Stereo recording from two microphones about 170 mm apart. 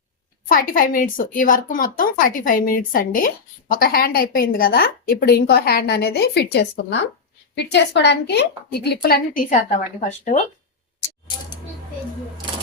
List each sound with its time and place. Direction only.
0.4 s a woman's voice: 55° left (ahead or behind)
10.1 s speech: 40° left (ahead or behind)